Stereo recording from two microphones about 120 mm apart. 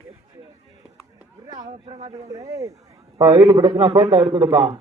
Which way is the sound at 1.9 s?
65° right (ahead or behind).